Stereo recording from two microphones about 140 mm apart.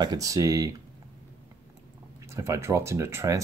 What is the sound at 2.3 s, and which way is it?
Speech, 20° right (ahead or behind).